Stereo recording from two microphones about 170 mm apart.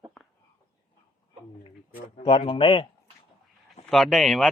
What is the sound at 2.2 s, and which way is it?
Speech, 35° left (ahead or behind).